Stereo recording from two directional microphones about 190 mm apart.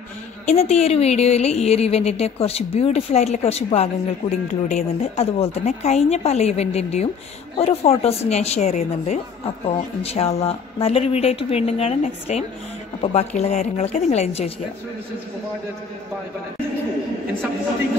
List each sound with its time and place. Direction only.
0.5 s a woman's voice: 35° left (ahead or behind)